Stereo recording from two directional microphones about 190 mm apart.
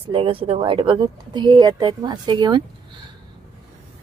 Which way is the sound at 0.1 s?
30° right (ahead or behind).